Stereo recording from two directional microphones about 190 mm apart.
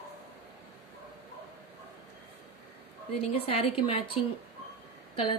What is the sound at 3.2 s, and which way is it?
Speech, 35° left (ahead or behind).